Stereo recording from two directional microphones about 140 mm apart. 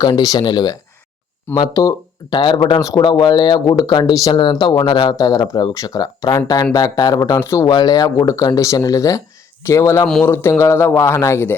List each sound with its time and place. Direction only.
0.0 s speech: 30° left (ahead or behind)